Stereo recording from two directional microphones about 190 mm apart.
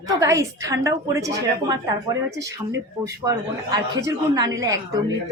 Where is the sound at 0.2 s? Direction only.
15° right (ahead or behind).